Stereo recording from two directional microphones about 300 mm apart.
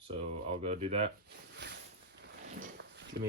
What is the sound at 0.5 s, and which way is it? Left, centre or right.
Speech, right.